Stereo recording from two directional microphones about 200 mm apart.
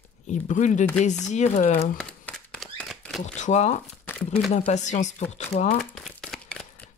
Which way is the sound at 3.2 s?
35° left (ahead or behind).